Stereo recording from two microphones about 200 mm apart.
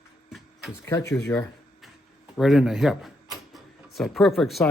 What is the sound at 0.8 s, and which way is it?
Speech, 15° left (ahead or behind).